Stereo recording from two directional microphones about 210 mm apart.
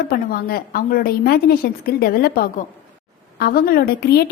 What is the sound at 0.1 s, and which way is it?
A woman's voice, 45° left (ahead or behind).